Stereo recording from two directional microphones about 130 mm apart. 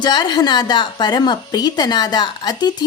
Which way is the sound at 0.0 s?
35° left (ahead or behind).